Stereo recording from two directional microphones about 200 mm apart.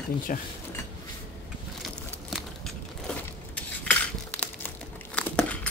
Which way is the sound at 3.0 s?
5° left (ahead or behind).